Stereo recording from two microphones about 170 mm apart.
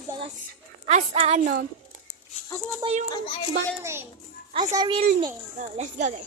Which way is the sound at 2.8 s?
25° right (ahead or behind).